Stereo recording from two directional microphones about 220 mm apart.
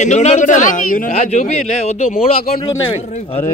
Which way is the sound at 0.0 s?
30° left (ahead or behind).